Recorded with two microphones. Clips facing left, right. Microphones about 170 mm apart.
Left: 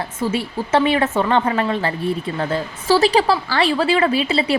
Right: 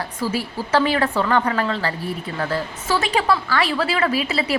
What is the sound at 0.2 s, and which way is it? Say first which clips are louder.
Speech: left 3 dB; 25° left (ahead or behind).